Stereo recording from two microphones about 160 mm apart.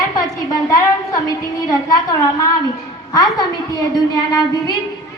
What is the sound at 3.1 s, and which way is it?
A woman's voice, 25° left (ahead or behind).